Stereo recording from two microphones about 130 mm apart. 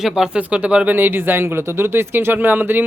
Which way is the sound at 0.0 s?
5° right (ahead or behind).